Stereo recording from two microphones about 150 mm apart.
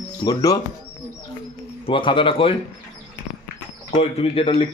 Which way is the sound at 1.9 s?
35° left (ahead or behind).